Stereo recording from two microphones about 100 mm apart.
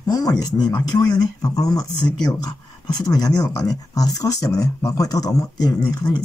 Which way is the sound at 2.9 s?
40° left (ahead or behind).